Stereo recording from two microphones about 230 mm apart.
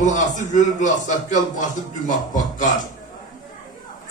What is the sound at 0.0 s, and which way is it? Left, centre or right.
A man's voice, left.